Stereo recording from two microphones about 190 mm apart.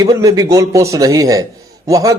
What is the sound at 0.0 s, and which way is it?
A man's voice, 20° right (ahead or behind).